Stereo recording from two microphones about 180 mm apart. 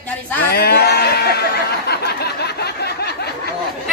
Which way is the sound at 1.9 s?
60° left (ahead or behind).